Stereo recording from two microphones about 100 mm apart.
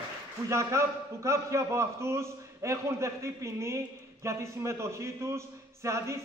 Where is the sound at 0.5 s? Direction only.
30° right (ahead or behind).